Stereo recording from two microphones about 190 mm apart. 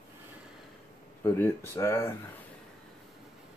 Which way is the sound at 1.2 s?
15° left (ahead or behind).